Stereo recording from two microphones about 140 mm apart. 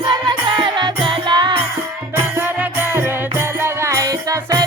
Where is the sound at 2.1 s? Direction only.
15° right (ahead or behind).